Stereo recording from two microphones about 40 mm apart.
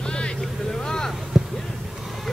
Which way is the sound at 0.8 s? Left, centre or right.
Centre.